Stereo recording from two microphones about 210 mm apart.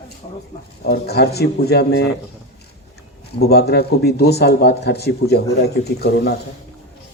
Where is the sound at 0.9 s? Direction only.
50° left (ahead or behind).